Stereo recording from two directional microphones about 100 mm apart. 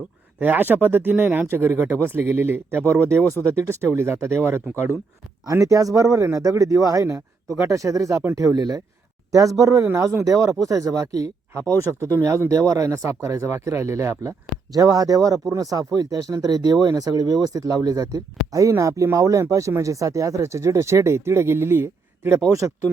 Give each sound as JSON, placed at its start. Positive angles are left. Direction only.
{"t": 0.3, "sound": "speech", "side_deg": -20}